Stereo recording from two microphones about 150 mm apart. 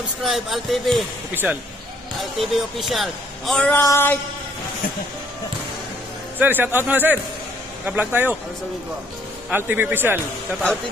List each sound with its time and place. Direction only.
0.2 s a man's voice: centre (ahead or behind)
1.3 s a man's voice: 10° right (ahead or behind)
2.5 s a man's voice: centre (ahead or behind)
3.8 s music: 15° left (ahead or behind)
6.4 s a man's voice: 15° right (ahead or behind)
9.5 s a man's voice: 10° right (ahead or behind)